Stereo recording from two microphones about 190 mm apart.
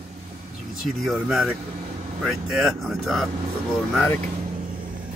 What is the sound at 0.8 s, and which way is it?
Speech, centre (ahead or behind).